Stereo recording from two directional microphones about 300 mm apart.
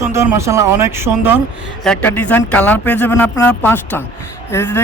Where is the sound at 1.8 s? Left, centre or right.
Centre.